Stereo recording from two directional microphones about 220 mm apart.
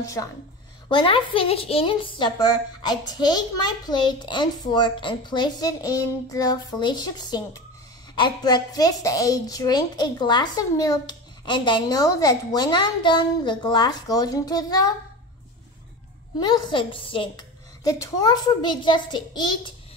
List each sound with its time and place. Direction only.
0.0 s a woman's voice: 15° left (ahead or behind)
16.3 s a woman's voice: 20° left (ahead or behind)